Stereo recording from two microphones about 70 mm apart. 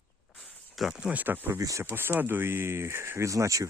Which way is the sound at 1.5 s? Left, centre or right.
Right.